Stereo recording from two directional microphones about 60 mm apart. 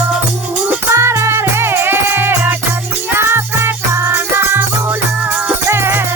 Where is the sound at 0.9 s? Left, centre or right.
Right.